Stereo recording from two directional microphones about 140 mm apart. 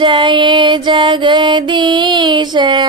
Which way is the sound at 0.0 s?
35° right (ahead or behind).